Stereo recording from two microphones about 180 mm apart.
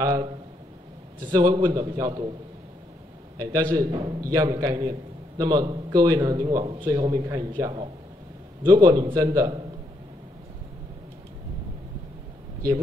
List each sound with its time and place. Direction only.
0.0 s a man's voice: 20° right (ahead or behind)
3.7 s a man's voice: 25° right (ahead or behind)